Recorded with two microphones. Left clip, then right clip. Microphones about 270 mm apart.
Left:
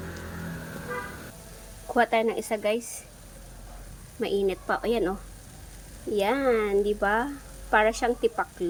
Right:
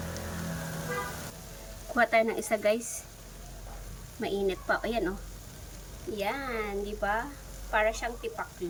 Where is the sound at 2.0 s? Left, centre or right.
Centre.